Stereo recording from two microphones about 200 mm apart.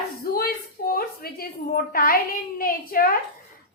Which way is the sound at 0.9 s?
50° left (ahead or behind).